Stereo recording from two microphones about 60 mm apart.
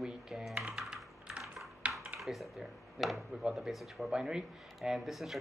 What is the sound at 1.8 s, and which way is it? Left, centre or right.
Typing, centre.